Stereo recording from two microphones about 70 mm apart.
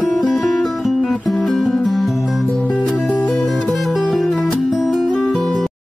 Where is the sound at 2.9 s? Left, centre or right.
Left.